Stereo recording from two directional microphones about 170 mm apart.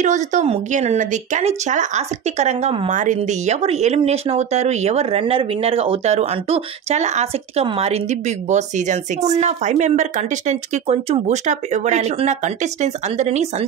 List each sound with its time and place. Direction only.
0.0 s a woman's voice: 45° right (ahead or behind)
2.9 s a woman's voice: 45° right (ahead or behind)